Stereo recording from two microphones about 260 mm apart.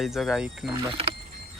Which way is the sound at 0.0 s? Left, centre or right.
Centre.